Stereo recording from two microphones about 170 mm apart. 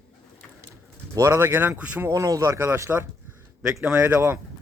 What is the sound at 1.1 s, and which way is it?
Speech, 15° right (ahead or behind).